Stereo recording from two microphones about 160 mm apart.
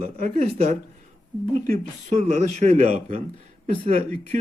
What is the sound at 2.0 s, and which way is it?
A man's voice, 45° right (ahead or behind).